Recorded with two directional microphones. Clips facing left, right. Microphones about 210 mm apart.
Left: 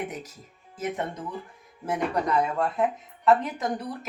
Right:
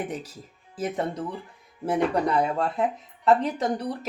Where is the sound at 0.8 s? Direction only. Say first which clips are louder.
Right 3 dB; 35° right (ahead or behind).